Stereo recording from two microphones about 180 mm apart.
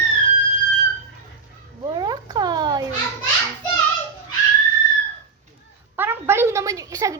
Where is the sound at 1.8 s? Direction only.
20° right (ahead or behind).